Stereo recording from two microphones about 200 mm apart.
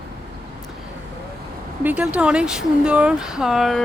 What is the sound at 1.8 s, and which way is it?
Speech, 5° right (ahead or behind).